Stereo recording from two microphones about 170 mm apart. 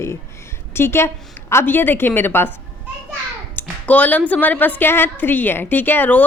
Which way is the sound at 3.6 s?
10° left (ahead or behind).